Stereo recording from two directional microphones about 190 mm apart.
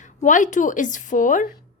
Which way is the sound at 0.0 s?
40° left (ahead or behind).